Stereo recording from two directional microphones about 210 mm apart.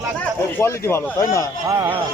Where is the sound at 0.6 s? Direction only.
10° left (ahead or behind).